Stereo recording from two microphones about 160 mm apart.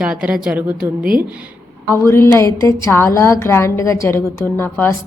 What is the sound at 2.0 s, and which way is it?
A woman's voice, 15° left (ahead or behind).